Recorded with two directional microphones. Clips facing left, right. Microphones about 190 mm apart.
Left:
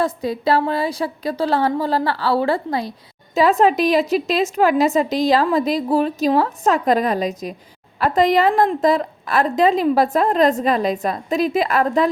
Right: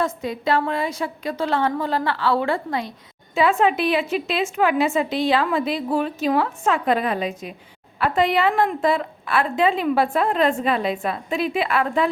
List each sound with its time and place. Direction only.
0.0 s a woman's voice: 35° left (ahead or behind)